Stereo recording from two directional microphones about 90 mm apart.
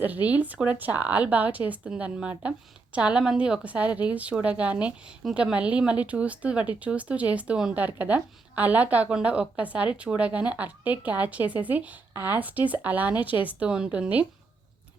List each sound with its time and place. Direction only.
0.0 s speech: 20° right (ahead or behind)